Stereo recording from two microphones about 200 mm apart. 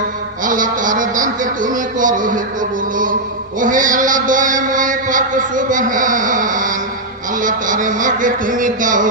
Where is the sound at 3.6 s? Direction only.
40° right (ahead or behind).